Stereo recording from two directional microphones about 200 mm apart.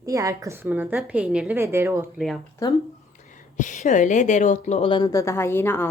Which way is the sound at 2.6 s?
15° left (ahead or behind).